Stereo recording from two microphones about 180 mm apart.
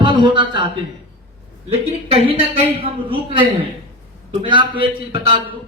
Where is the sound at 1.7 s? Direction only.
35° right (ahead or behind).